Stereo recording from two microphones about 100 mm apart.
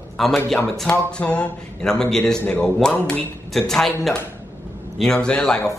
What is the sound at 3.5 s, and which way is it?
Speech, 5° left (ahead or behind).